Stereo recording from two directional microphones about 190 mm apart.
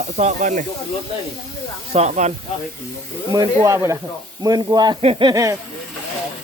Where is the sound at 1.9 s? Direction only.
35° right (ahead or behind).